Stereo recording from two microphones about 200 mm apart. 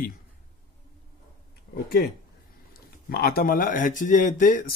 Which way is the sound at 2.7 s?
50° left (ahead or behind).